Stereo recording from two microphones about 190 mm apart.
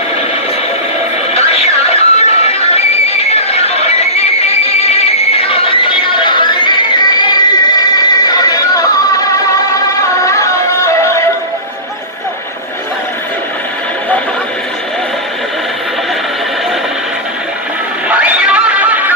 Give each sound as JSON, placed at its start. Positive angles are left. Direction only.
{"t": 1.3, "sound": "music", "side_deg": 35}
{"t": 18.1, "sound": "chatter", "side_deg": -5}